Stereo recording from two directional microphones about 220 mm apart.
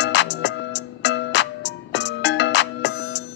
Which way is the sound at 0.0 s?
55° left (ahead or behind).